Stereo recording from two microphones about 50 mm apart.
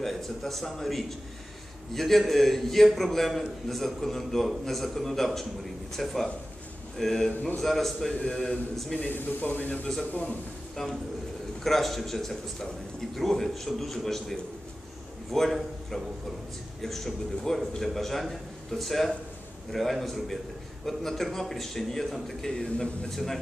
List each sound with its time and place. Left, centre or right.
0.0 s a man's voice: centre
8.9 s speech: left
10.8 s a man's voice: centre
15.3 s a man's voice: centre